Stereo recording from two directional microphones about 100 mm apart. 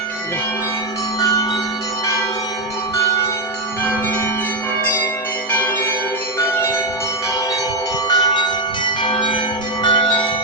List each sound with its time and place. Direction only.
1.2 s bell: 35° left (ahead or behind)
5.5 s change ringing: 15° left (ahead or behind)
8.1 s bell: 45° left (ahead or behind)
9.0 s change ringing: 55° left (ahead or behind)
9.8 s bell: 50° left (ahead or behind)